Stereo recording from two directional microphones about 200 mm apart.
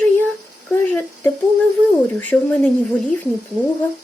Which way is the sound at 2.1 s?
5° left (ahead or behind).